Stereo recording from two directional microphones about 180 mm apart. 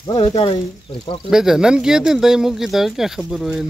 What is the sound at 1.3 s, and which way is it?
Speech, 5° right (ahead or behind).